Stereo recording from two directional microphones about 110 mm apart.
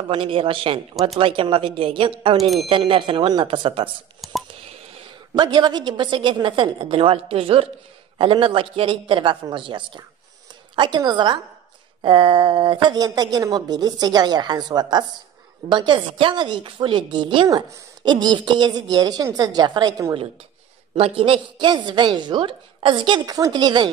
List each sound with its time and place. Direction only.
0.1 s a woman's voice: 50° right (ahead or behind)
4.2 s telephone dialing: centre (ahead or behind)
5.3 s a woman's voice: 40° right (ahead or behind)
20.9 s a woman's voice: 55° right (ahead or behind)
23.2 s a woman's voice: 35° right (ahead or behind)